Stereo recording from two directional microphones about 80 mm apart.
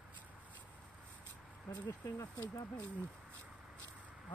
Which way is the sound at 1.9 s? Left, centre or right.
Left.